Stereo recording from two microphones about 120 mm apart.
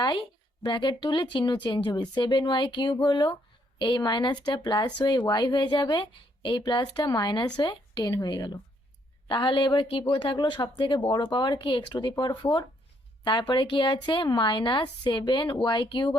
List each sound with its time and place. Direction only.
0.0 s speech: 40° left (ahead or behind)